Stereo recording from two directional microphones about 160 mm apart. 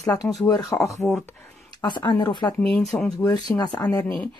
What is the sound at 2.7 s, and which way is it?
Speech, 5° left (ahead or behind).